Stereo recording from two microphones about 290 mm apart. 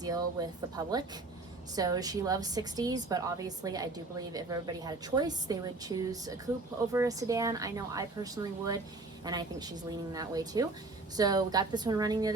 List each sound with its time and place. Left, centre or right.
0.0 s a woman's voice: centre